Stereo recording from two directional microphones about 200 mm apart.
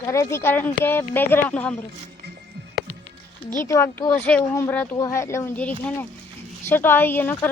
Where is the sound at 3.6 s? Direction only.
15° left (ahead or behind).